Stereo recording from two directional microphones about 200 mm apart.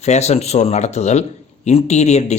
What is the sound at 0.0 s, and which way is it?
Speech, 35° left (ahead or behind).